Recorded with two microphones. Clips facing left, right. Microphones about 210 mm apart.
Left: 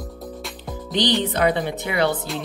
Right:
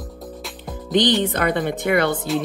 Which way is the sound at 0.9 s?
50° right (ahead or behind).